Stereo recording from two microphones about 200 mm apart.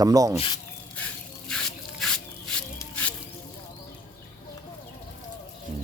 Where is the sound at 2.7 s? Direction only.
5° left (ahead or behind).